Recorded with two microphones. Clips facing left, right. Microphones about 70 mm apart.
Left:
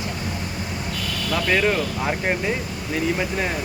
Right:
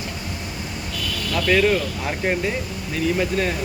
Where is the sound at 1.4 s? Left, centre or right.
Centre.